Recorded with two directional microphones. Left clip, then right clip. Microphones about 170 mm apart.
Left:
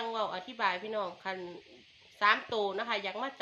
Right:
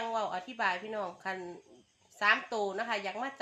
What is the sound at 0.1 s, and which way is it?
Speech, 55° right (ahead or behind).